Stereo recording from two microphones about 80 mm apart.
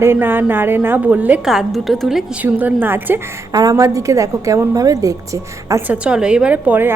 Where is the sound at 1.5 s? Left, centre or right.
Centre.